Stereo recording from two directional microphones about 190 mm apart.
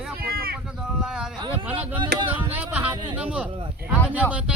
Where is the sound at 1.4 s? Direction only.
25° right (ahead or behind).